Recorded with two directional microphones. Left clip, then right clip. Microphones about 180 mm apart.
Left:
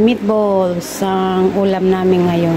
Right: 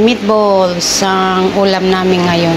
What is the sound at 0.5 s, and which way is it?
Speech, 20° left (ahead or behind).